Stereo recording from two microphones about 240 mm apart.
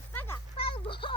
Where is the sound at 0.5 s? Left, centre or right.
Left.